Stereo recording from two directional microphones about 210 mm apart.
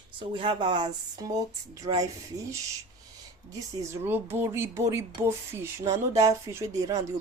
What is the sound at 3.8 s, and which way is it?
Speech, 10° right (ahead or behind).